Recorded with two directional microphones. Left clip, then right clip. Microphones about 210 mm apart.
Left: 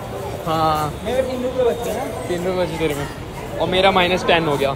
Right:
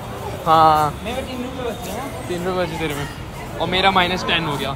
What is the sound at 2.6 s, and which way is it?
Speech, 10° right (ahead or behind).